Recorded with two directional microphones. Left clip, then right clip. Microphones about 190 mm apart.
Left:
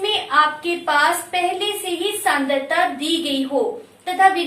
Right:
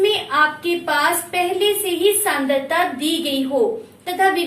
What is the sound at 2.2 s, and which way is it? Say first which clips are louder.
A woman's voice: even; 15° left (ahead or behind).